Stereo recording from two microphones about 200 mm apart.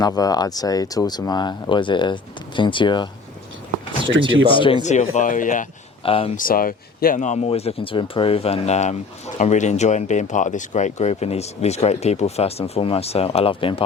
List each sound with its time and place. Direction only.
0.0 s speech: 20° left (ahead or behind)
4.4 s speech: 25° left (ahead or behind); by 5.6 s 40° left (ahead or behind)
6.0 s speech: 30° left (ahead or behind)
6.3 s speech: 45° left (ahead or behind); by 13.8 s 25° left (ahead or behind)